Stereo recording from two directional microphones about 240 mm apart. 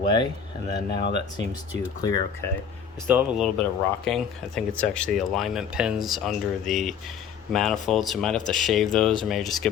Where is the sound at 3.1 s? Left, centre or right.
Centre.